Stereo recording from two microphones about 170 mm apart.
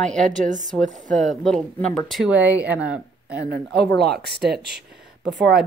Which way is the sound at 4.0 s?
70° right (ahead or behind).